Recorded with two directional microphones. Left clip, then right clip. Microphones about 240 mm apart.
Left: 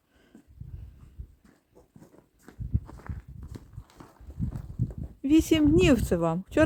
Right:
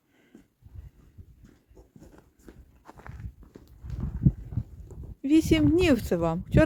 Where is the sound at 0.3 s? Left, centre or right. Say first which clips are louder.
Right 1 dB; centre.